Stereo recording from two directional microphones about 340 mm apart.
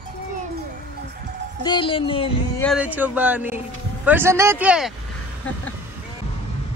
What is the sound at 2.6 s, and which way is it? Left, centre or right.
Speech, centre.